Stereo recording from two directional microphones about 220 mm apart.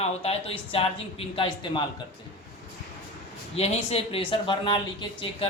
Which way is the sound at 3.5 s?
30° left (ahead or behind).